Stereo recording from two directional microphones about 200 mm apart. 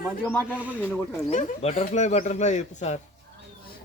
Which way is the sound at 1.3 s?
35° left (ahead or behind).